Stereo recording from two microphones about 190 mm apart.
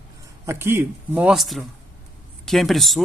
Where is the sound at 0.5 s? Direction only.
15° right (ahead or behind).